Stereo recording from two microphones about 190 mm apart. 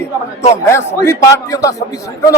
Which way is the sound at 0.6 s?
15° left (ahead or behind).